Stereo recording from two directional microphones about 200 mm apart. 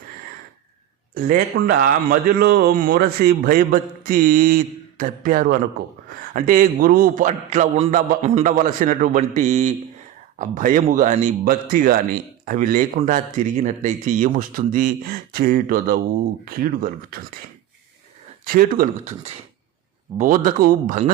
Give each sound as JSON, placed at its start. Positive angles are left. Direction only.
{"t": 1.1, "sound": "speech", "side_deg": -45}
{"t": 18.4, "sound": "speech", "side_deg": -45}
{"t": 20.1, "sound": "speech", "side_deg": -40}